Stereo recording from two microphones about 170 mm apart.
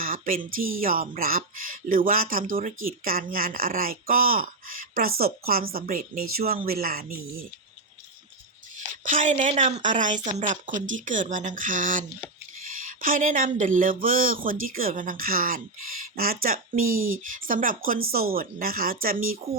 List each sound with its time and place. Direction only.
0.0 s speech: 55° right (ahead or behind)
9.0 s speech: 50° right (ahead or behind)